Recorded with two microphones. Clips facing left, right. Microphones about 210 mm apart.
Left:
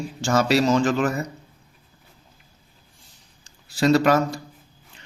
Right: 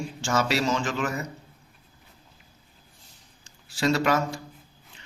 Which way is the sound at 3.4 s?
40° left (ahead or behind).